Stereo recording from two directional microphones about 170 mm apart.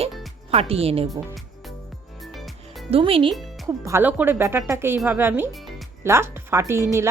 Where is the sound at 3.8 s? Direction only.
15° right (ahead or behind).